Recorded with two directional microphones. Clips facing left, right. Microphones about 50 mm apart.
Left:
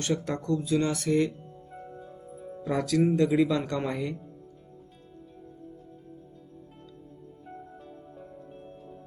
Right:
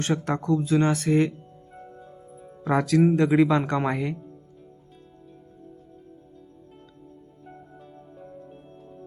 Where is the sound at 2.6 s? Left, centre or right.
Right.